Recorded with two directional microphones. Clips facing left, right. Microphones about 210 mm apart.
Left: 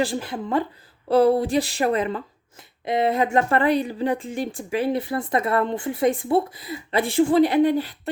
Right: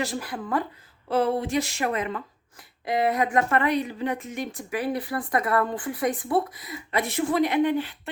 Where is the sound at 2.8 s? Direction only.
25° left (ahead or behind).